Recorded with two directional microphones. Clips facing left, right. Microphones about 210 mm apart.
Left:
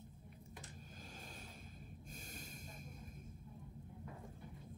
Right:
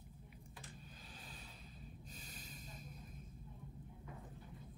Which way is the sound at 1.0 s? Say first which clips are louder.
Left 3 dB; 45° left (ahead or behind).